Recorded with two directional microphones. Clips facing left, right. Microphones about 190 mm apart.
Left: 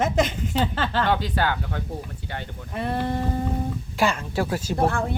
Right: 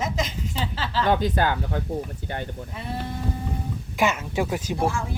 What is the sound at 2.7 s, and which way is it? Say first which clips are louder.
Speech: left 9 dB; 55° left (ahead or behind).